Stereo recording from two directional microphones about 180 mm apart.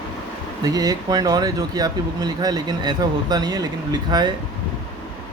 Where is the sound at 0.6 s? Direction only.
20° right (ahead or behind).